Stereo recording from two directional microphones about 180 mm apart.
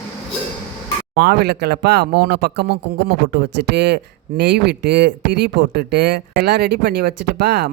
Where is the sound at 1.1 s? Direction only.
60° right (ahead or behind).